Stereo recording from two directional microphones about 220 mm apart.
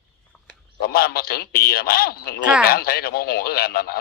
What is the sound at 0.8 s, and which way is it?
Speech, 45° left (ahead or behind).